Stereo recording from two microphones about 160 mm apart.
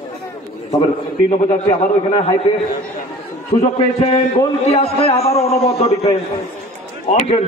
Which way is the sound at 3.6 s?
40° left (ahead or behind).